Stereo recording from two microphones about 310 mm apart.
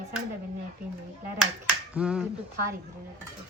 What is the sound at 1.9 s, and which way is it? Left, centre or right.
Speech, centre.